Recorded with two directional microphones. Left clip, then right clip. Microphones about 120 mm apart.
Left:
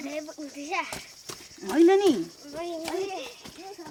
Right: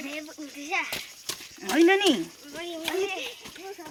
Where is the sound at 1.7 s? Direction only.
20° right (ahead or behind).